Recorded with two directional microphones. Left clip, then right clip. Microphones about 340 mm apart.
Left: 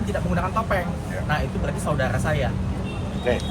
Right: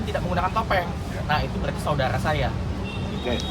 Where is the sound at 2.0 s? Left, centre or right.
Centre.